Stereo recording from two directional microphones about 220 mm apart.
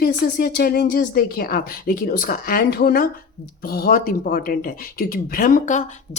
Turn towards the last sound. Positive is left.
turn(degrees=35)  # may be behind; listen again after turning